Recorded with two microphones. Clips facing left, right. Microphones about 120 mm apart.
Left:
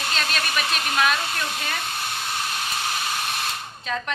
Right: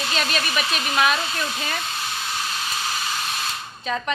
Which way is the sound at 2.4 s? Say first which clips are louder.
Even; 55° left (ahead or behind).